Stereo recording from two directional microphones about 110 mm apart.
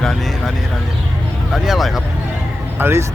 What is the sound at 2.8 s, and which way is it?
Speech, 25° right (ahead or behind).